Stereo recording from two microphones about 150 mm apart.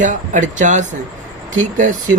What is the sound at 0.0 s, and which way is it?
Speech, 55° right (ahead or behind).